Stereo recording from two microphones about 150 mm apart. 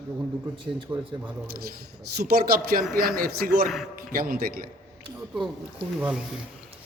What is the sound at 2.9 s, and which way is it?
A man's voice, 75° right (ahead or behind).